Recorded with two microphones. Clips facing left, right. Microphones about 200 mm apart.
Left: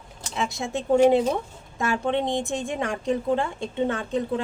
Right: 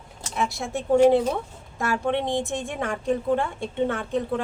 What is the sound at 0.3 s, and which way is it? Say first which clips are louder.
A woman's voice: even; 20° left (ahead or behind).